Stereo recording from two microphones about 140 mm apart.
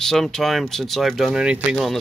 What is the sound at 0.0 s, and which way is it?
Speech, 5° left (ahead or behind).